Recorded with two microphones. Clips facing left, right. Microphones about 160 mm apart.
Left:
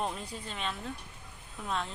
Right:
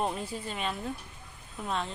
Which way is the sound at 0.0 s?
5° right (ahead or behind).